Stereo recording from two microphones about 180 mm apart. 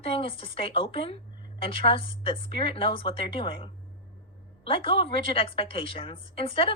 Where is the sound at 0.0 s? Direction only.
30° left (ahead or behind).